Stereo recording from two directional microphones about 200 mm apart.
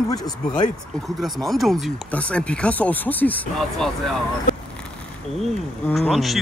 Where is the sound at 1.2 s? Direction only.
Centre (ahead or behind).